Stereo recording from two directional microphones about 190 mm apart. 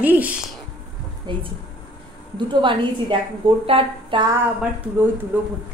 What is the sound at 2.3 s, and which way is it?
A woman's voice, 25° right (ahead or behind).